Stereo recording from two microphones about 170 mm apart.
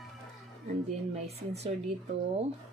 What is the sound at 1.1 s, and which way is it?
Speech, 40° right (ahead or behind).